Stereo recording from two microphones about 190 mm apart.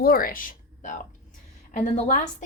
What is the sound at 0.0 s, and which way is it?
A woman's voice, 50° left (ahead or behind).